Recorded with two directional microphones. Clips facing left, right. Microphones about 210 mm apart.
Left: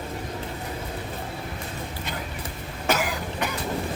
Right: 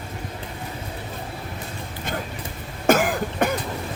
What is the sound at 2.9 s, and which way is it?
Cough, 50° right (ahead or behind).